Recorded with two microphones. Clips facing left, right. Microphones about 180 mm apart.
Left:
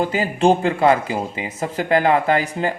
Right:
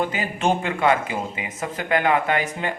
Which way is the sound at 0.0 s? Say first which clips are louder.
Left 6 dB; 35° left (ahead or behind).